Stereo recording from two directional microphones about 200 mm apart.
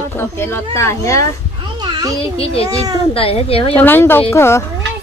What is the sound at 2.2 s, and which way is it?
A child's voice, 30° left (ahead or behind).